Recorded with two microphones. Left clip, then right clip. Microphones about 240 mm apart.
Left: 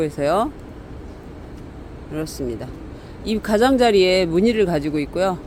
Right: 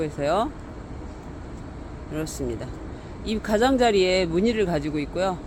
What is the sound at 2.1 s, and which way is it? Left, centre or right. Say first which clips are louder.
Speech: left 3 dB; centre.